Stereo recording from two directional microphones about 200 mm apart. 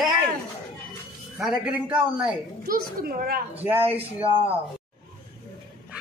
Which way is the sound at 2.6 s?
45° right (ahead or behind).